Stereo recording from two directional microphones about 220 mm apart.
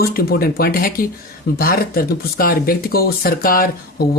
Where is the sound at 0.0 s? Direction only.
45° left (ahead or behind).